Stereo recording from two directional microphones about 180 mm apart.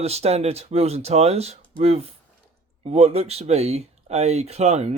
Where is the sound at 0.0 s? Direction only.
35° right (ahead or behind).